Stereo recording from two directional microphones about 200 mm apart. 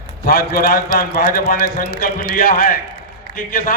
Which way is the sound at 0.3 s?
50° left (ahead or behind).